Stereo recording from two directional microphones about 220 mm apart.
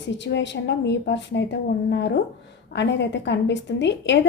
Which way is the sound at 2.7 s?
55° left (ahead or behind).